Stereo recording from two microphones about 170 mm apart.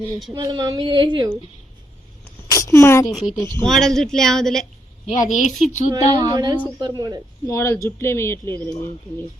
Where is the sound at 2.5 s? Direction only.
15° left (ahead or behind).